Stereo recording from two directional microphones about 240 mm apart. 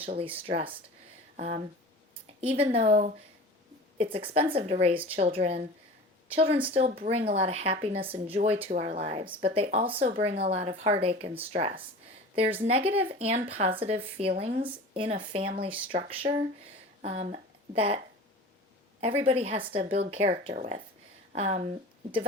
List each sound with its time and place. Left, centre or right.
0.0 s speech: right
1.4 s speech: right